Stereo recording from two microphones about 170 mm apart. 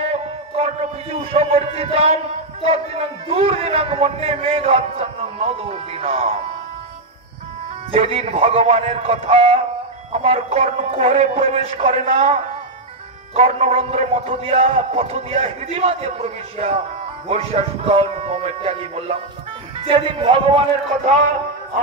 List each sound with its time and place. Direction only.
0.0 s a sound: 40° right (ahead or behind)
1.1 s a man's voice: 35° right (ahead or behind)
7.9 s a man's voice: 35° right (ahead or behind)
13.3 s a man's voice: 35° right (ahead or behind)